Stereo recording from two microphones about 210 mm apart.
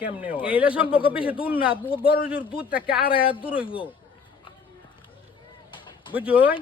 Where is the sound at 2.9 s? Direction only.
45° left (ahead or behind).